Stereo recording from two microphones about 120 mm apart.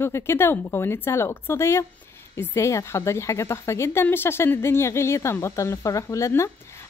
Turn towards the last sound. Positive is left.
turn(degrees=25)  # may be behind; listen again after turning